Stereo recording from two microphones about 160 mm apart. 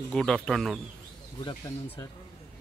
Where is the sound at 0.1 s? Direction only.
5° left (ahead or behind).